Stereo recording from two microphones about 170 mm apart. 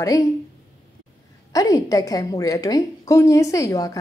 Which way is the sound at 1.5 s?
20° left (ahead or behind).